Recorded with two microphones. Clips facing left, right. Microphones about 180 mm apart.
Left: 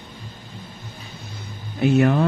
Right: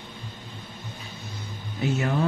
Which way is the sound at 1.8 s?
65° left (ahead or behind).